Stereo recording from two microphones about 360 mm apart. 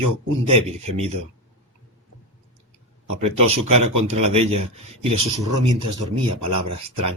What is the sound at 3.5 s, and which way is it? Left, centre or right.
Speech, centre.